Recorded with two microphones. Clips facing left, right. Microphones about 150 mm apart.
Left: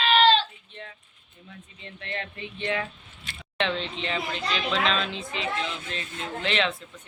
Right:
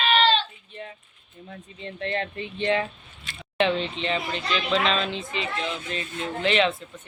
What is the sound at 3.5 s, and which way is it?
Speech, 5° right (ahead or behind).